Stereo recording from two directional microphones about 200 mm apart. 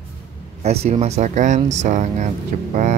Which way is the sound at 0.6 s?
30° right (ahead or behind).